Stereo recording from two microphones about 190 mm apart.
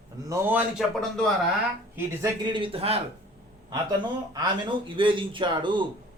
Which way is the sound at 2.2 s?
25° right (ahead or behind).